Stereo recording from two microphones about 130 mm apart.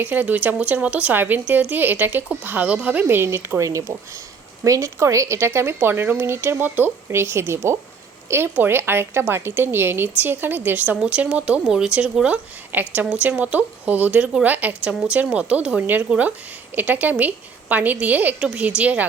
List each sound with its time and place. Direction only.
0.0 s a woman's voice: 15° right (ahead or behind)